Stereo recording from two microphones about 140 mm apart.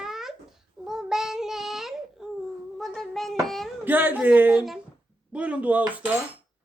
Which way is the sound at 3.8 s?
15° right (ahead or behind).